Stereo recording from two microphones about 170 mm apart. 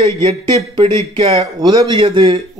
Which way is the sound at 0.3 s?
40° right (ahead or behind).